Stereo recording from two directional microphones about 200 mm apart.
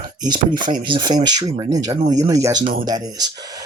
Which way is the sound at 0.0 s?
25° right (ahead or behind).